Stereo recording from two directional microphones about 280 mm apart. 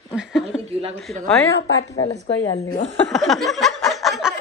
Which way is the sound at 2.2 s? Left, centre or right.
Left.